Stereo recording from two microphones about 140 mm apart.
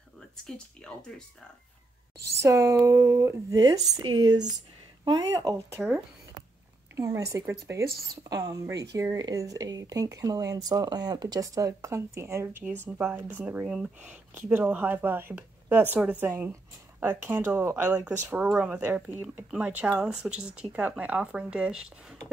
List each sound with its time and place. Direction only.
0.5 s speech: 5° left (ahead or behind)
2.2 s speech: 20° right (ahead or behind)
7.0 s speech: 20° right (ahead or behind); by 22.2 s 5° right (ahead or behind)